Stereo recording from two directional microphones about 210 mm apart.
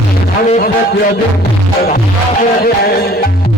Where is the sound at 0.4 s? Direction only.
35° left (ahead or behind).